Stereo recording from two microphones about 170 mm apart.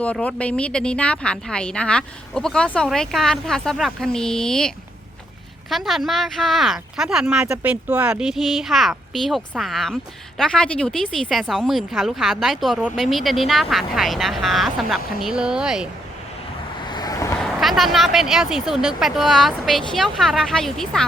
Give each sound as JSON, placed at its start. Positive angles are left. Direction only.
{"t": 0.0, "sound": "speech", "side_deg": 5}
{"t": 5.7, "sound": "speech", "side_deg": 0}
{"t": 16.9, "sound": "vehicle", "side_deg": 20}
{"t": 17.4, "sound": "speech", "side_deg": 0}